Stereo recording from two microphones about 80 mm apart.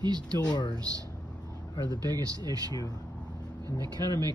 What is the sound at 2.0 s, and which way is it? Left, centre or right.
Speech, right.